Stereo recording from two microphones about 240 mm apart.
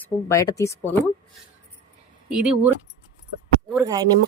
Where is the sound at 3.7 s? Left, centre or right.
Centre.